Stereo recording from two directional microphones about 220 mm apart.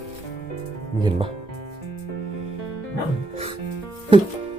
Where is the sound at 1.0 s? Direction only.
20° right (ahead or behind).